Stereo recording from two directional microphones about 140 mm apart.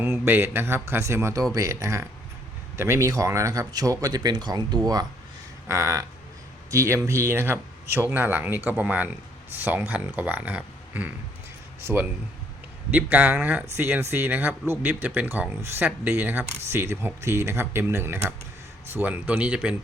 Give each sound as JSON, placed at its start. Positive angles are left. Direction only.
{"t": 0.0, "sound": "speech", "side_deg": -15}